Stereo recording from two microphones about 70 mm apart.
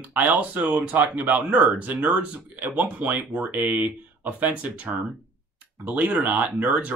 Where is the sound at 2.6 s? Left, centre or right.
Right.